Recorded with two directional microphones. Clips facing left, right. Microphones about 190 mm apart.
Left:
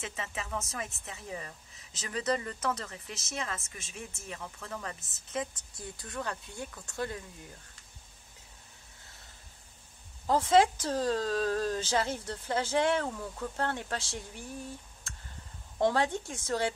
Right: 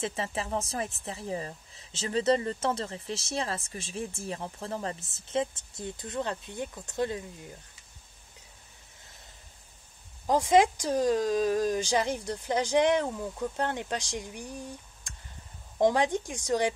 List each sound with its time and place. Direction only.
0.0 s speech: 35° right (ahead or behind)
10.2 s speech: 15° right (ahead or behind)